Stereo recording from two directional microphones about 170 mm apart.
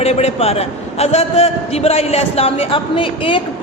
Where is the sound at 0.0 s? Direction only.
40° left (ahead or behind).